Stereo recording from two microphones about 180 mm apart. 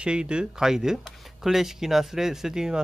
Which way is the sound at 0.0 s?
5° right (ahead or behind).